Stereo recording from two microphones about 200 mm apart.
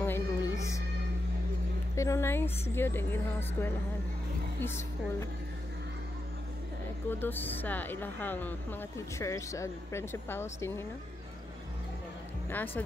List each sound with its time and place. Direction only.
0.0 s music: 15° left (ahead or behind)
2.0 s speech: 15° left (ahead or behind)
7.1 s speech: 10° left (ahead or behind)